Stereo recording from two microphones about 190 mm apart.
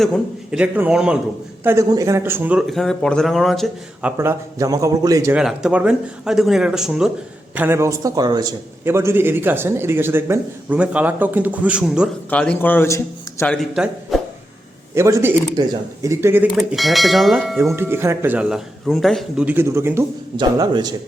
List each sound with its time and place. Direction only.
0.0 s speech: centre (ahead or behind)
1.6 s speech: 15° right (ahead or behind); by 4.1 s centre (ahead or behind)
4.2 s a man's voice: 15° right (ahead or behind)
5.4 s a man's voice: 5° right (ahead or behind)
12.3 s a man's voice: 5° left (ahead or behind)
14.9 s a man's voice: 15° right (ahead or behind)
16.6 s speech: centre (ahead or behind)
17.7 s a man's voice: 10° right (ahead or behind)
20.3 s speech: 25° right (ahead or behind)